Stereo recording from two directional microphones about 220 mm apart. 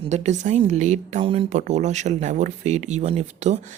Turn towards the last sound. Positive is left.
turn(degrees=-30)  # may be behind; listen again after turning